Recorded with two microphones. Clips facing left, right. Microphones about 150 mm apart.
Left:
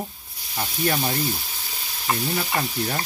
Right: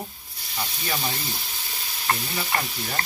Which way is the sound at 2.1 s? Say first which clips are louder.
Left 1 dB; 5° left (ahead or behind).